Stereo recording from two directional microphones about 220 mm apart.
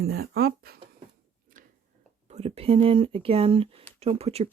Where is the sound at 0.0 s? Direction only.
45° right (ahead or behind).